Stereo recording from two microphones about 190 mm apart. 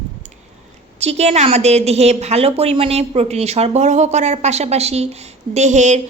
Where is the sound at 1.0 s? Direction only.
35° right (ahead or behind).